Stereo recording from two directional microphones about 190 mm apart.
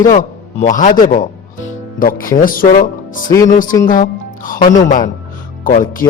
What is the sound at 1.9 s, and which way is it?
Speech, 50° left (ahead or behind).